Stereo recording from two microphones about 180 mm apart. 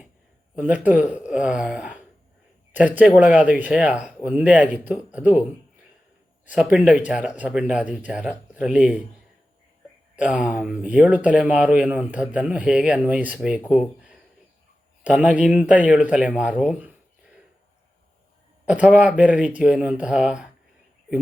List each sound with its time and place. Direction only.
0.5 s speech: 10° right (ahead or behind)
10.2 s speech: 5° right (ahead or behind)
18.7 s speech: 5° right (ahead or behind)